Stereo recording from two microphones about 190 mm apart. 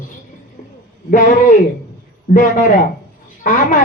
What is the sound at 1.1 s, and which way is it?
Speech, 45° left (ahead or behind).